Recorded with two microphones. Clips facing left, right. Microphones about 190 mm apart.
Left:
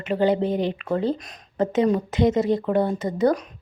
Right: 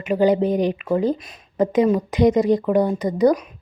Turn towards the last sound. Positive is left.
turn(degrees=-10)  # may be behind; listen again after turning